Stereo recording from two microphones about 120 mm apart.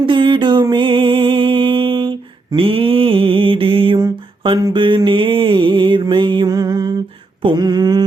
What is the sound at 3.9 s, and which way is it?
Mantra, 35° right (ahead or behind).